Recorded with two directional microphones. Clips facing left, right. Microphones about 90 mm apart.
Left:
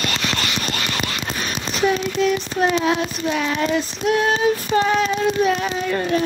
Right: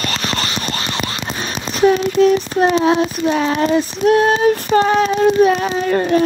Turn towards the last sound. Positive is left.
turn(degrees=-40)  # may be behind; listen again after turning